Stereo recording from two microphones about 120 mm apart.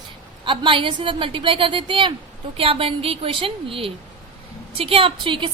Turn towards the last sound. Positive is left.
turn(degrees=-45)  # may be behind; listen again after turning